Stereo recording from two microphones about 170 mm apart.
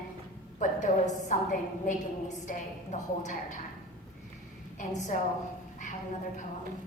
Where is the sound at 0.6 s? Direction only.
45° left (ahead or behind).